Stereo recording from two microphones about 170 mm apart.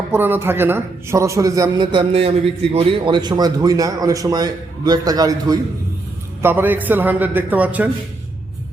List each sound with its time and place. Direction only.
0.1 s a man's voice: 10° right (ahead or behind)
6.4 s a man's voice: 10° right (ahead or behind)